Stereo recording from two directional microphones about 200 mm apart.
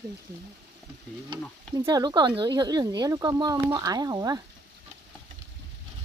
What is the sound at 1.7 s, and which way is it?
Speech, 20° right (ahead or behind).